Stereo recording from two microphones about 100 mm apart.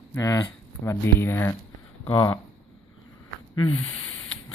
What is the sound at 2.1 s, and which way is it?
Speech, 50° left (ahead or behind).